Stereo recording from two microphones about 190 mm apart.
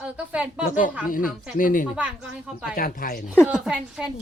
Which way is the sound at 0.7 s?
45° left (ahead or behind).